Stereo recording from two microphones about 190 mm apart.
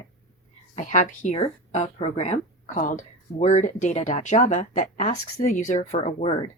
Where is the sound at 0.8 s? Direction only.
40° left (ahead or behind).